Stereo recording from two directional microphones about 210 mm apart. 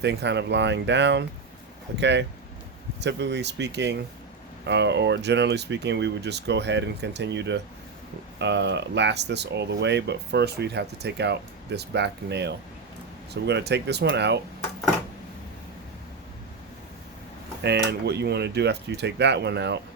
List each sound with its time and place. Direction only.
0.0 s speech: 55° right (ahead or behind)
17.6 s speech: 55° right (ahead or behind)